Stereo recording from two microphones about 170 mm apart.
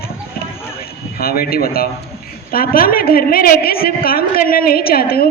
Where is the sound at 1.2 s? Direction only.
60° left (ahead or behind).